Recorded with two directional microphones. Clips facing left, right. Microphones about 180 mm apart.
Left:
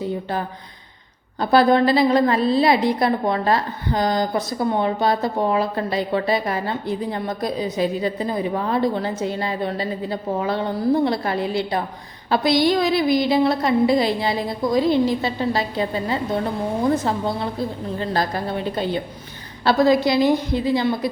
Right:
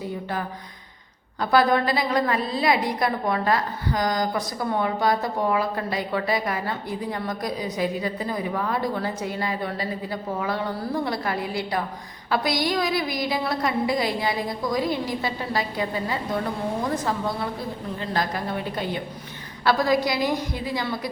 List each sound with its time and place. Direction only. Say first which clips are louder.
1.4 s a woman's voice: left 4 dB; 30° left (ahead or behind)